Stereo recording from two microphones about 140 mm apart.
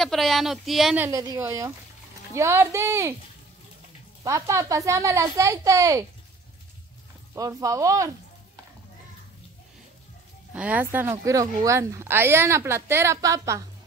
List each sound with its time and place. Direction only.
0.0 s speech: centre (ahead or behind)
1.1 s a woman's voice: 25° right (ahead or behind)
4.2 s a woman's voice: 25° right (ahead or behind)
7.3 s a woman's voice: 25° right (ahead or behind)
10.5 s speech: 10° right (ahead or behind)